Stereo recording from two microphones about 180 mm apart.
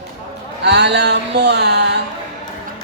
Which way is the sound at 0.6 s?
70° right (ahead or behind).